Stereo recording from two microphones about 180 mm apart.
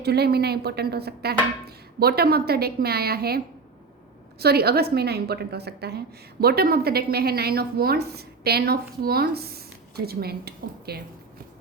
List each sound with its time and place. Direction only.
0.0 s a woman's voice: 65° right (ahead or behind)